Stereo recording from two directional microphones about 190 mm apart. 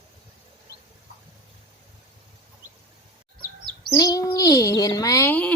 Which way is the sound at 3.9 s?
20° left (ahead or behind).